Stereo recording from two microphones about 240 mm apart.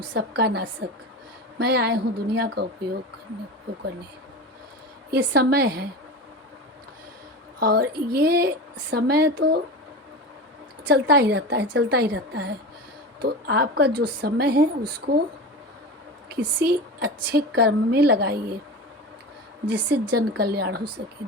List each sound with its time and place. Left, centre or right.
0.1 s a woman's voice: right
5.1 s a woman's voice: right
7.6 s speech: right
10.8 s a woman's voice: right
16.3 s a woman's voice: right
19.9 s a woman's voice: right